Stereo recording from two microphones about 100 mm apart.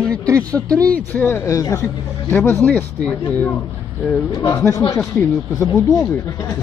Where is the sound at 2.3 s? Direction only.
20° left (ahead or behind).